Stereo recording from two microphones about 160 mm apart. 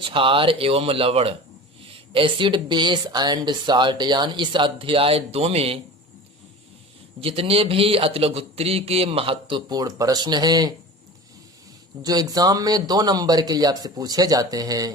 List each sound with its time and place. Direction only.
0.0 s speech: 35° right (ahead or behind)
7.2 s speech: 35° right (ahead or behind)
12.0 s speech: 25° right (ahead or behind)